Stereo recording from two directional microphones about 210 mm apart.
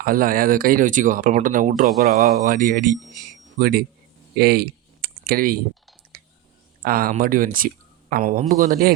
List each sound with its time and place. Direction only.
0.0 s speech: 40° right (ahead or behind)
4.4 s a sound: 50° right (ahead or behind)
6.8 s speech: 45° right (ahead or behind)